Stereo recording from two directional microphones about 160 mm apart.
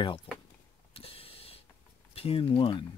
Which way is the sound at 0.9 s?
35° left (ahead or behind).